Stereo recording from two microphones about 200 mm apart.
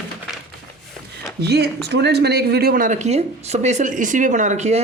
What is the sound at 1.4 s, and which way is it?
Speech, 55° right (ahead or behind).